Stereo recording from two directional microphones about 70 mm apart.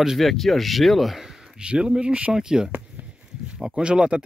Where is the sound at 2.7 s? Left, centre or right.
Right.